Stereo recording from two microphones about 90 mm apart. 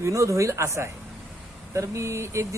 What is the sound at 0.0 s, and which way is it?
Speech, 35° right (ahead or behind).